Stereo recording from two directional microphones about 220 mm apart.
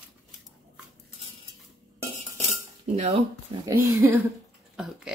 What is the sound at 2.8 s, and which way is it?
Speech, 30° right (ahead or behind).